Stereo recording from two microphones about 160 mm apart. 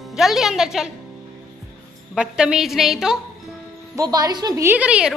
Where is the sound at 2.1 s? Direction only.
5° right (ahead or behind).